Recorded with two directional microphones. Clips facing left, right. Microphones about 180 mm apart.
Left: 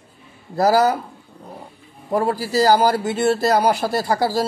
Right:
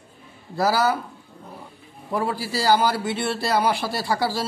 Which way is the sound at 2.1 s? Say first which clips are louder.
Left 5 dB; 45° left (ahead or behind).